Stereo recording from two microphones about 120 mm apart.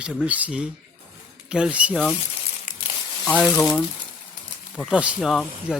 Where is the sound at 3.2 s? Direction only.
10° left (ahead or behind).